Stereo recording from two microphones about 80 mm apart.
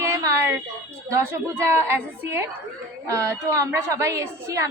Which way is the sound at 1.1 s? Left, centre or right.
Right.